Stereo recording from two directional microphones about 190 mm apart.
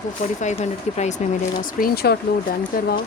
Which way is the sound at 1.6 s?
50° left (ahead or behind).